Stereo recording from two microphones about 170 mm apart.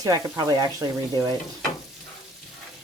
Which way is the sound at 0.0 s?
20° right (ahead or behind).